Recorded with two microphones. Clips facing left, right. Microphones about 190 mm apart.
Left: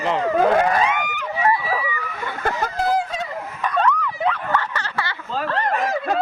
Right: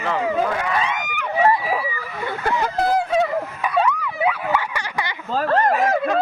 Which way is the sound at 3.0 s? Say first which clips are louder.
Right 6 dB; 60° right (ahead or behind).